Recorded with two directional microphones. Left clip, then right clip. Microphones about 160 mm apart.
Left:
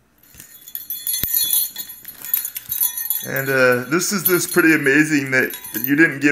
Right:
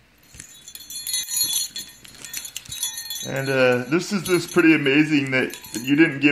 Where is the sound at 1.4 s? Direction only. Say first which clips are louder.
Even; 20° right (ahead or behind).